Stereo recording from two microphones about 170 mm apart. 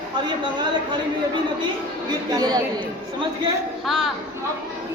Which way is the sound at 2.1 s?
25° right (ahead or behind).